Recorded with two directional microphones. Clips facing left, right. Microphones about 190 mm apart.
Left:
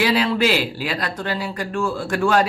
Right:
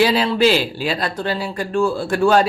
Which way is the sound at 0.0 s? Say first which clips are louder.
Right 3 dB; 30° right (ahead or behind).